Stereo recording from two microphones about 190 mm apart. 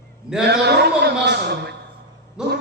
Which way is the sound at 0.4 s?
60° right (ahead or behind).